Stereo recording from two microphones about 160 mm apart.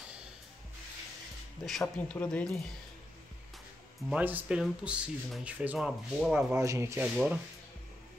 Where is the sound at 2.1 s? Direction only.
5° left (ahead or behind).